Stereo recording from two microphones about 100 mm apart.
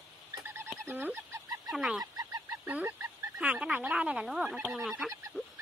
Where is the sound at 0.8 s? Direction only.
20° right (ahead or behind).